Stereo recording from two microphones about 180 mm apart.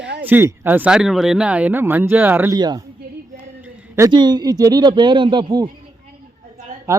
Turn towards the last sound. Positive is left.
turn(degrees=-15)  # may be behind; listen again after turning